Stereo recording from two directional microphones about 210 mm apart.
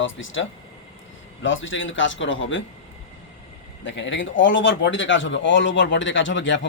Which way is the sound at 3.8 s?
60° left (ahead or behind).